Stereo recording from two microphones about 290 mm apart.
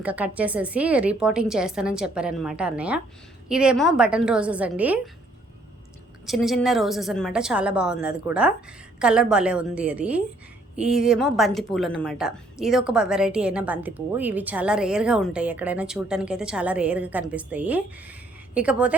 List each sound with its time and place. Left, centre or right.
0.0 s a woman's voice: centre
6.2 s a woman's voice: centre